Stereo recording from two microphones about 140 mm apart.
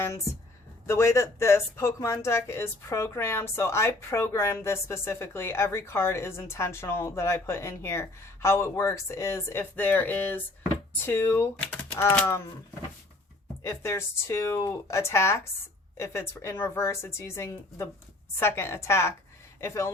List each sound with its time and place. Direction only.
0.9 s speech: 20° left (ahead or behind)
13.6 s speech: 20° left (ahead or behind)